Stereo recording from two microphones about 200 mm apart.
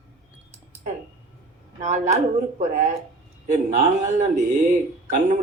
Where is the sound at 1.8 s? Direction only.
35° right (ahead or behind).